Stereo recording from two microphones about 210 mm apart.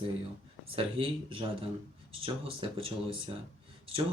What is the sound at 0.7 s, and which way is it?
A man's voice, 25° right (ahead or behind).